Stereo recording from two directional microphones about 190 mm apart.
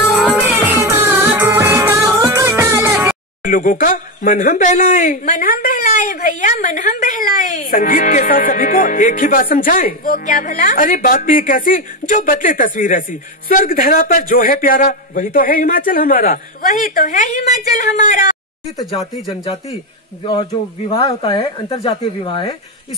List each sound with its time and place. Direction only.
0.1 s music: 5° right (ahead or behind)
3.4 s speech: 45° left (ahead or behind)
20.9 s speech: 25° left (ahead or behind)